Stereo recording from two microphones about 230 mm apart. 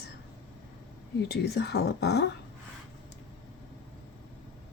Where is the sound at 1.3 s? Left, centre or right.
Left.